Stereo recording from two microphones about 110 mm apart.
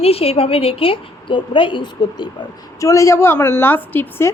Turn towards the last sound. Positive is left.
turn(degrees=20)  # may be behind; listen again after turning